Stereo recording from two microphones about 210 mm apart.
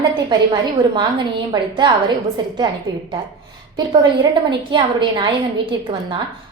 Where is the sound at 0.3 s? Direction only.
20° right (ahead or behind).